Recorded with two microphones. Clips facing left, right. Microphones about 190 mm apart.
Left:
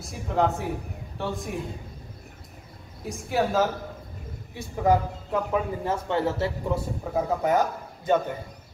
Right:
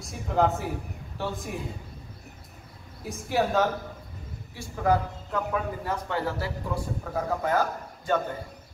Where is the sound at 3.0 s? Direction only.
Centre (ahead or behind).